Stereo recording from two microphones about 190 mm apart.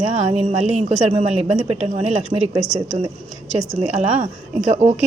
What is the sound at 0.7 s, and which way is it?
Speech, 35° right (ahead or behind).